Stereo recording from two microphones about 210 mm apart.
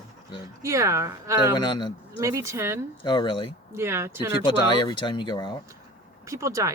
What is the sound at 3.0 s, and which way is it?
Speech, 25° left (ahead or behind).